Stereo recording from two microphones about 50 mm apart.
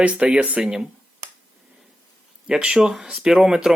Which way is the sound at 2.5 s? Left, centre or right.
Centre.